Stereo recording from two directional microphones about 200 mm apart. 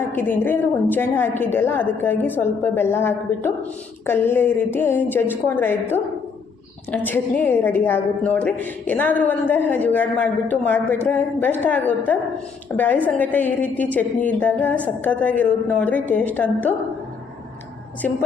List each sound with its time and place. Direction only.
0.1 s a woman's voice: 10° left (ahead or behind)